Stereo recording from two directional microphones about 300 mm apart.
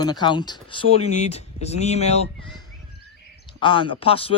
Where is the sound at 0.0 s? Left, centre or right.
Centre.